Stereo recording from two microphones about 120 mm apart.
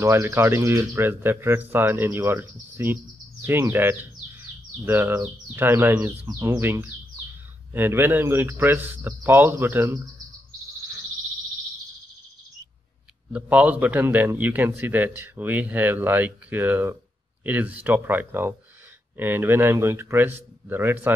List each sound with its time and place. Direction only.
0.0 s a man's voice: 25° right (ahead or behind)
13.3 s a man's voice: 10° right (ahead or behind)